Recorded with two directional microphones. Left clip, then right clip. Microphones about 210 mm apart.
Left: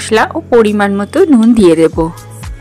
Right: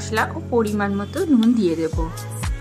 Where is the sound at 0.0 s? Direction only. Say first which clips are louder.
Left 11 dB; 40° left (ahead or behind).